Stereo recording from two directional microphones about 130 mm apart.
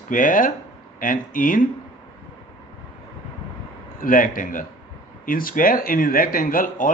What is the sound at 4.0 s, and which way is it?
Speech, 90° left.